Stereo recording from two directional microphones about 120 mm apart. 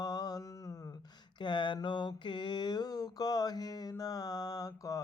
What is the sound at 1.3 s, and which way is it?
Mantra, 40° left (ahead or behind).